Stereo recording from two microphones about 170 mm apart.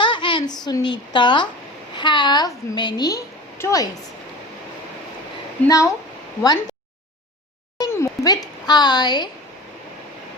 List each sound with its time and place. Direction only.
0.0 s a woman's voice: 30° left (ahead or behind)
5.6 s a woman's voice: 20° left (ahead or behind)
7.8 s speech: 20° left (ahead or behind)